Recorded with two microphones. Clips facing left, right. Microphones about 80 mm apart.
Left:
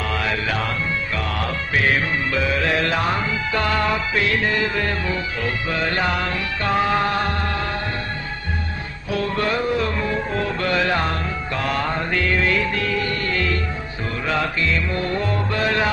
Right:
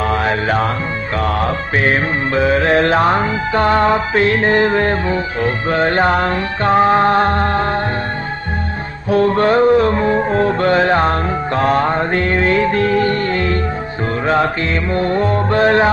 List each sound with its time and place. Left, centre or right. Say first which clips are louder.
0.1 s music: right 7 dB; right
9.1 s music: right 10 dB; right